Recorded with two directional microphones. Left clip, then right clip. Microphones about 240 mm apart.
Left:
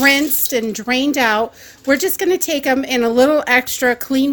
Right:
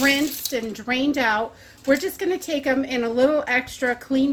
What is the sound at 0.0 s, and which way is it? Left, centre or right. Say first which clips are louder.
A woman's voice: left 6 dB; left.